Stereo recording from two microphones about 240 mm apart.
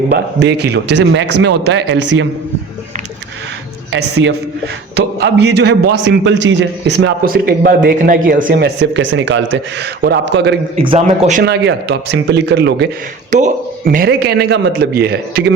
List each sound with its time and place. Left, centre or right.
0.1 s a man's voice: right
3.9 s a man's voice: right
10.8 s speech: right
11.4 s a man's voice: right
13.3 s a man's voice: right